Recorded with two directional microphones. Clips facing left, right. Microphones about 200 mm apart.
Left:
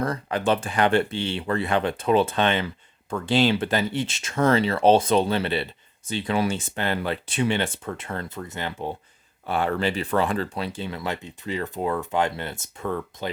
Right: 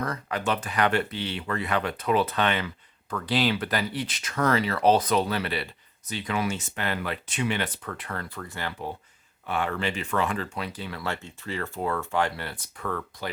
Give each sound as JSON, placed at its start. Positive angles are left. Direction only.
{"t": 0.0, "sound": "speech", "side_deg": 30}
{"t": 9.5, "sound": "speech", "side_deg": 35}